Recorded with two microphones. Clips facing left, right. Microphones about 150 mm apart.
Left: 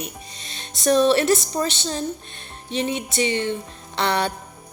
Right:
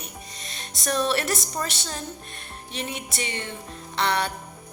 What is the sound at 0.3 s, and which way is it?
A woman's voice, 30° left (ahead or behind).